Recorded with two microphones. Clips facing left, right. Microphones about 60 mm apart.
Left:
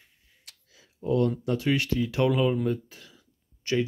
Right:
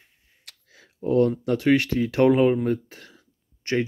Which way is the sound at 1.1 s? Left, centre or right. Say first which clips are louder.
Right 4 dB; right.